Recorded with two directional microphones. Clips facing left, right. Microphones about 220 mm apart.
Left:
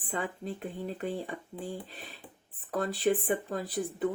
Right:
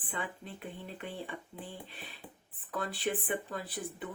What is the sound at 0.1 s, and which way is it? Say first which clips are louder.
Speech: left 6 dB; 45° left (ahead or behind).